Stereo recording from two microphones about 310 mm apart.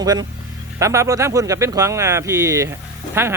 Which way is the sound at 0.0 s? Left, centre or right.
Centre.